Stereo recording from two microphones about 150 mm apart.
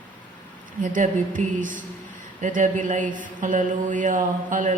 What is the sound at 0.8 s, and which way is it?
Speech, 60° right (ahead or behind).